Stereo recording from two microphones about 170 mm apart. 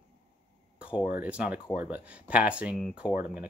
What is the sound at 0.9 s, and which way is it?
Speech, 10° right (ahead or behind).